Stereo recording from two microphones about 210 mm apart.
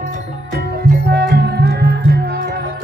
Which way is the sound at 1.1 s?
50° right (ahead or behind).